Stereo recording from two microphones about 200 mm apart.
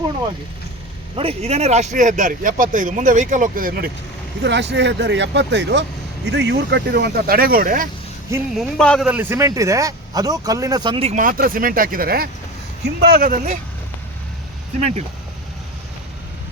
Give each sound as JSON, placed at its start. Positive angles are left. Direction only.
{"t": 1.1, "sound": "speech", "side_deg": -30}
{"t": 4.4, "sound": "speech", "side_deg": -60}
{"t": 8.5, "sound": "a man's voice", "side_deg": 0}
{"t": 9.0, "sound": "speech", "side_deg": -10}
{"t": 14.8, "sound": "speech", "side_deg": -35}